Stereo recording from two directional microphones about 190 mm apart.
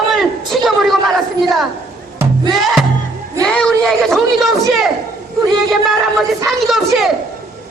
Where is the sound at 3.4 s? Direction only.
5° left (ahead or behind).